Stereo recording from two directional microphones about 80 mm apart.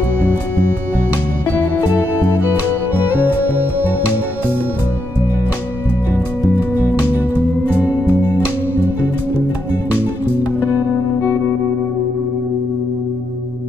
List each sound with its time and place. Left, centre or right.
6.1 s music: left
7.9 s music: right